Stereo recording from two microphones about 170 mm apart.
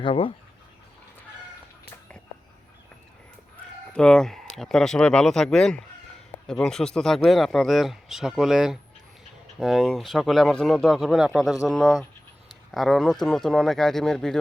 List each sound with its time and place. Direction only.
0.0 s speech: 30° left (ahead or behind)
3.9 s speech: 5° left (ahead or behind)